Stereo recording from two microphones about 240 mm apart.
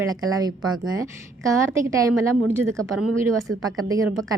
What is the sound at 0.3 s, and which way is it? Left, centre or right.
A woman's voice, centre.